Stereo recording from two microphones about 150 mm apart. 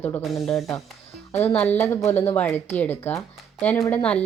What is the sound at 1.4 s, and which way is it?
Speech, 10° left (ahead or behind).